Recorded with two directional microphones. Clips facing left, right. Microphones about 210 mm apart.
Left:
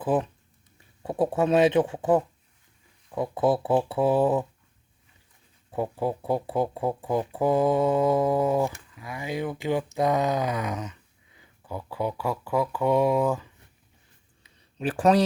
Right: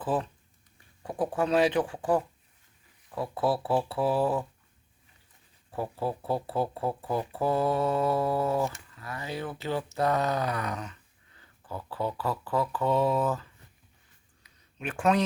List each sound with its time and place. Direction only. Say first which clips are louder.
0.0 s speech: left 5 dB; 15° left (ahead or behind)
5.7 s speech: left 4 dB; 20° left (ahead or behind)
14.4 s a sound: left 8 dB; 35° left (ahead or behind)